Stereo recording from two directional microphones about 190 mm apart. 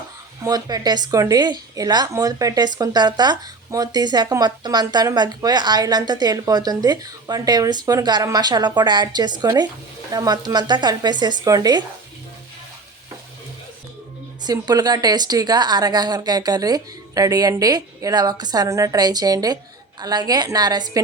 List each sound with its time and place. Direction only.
0.4 s speech: 20° right (ahead or behind)
14.4 s speech: 20° right (ahead or behind)